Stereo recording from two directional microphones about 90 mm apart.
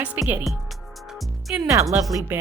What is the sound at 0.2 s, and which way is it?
Speech, 20° right (ahead or behind).